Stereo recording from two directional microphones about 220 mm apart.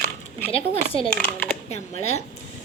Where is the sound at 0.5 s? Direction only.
25° left (ahead or behind).